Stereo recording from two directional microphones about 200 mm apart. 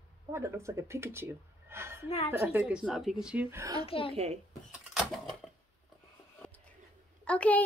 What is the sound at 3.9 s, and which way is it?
Speech, 30° left (ahead or behind).